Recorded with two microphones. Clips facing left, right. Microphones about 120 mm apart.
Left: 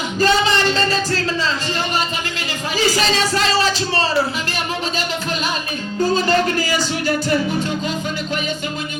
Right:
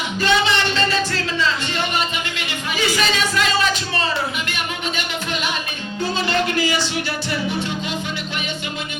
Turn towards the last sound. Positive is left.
turn(degrees=40)  # may be behind; listen again after turning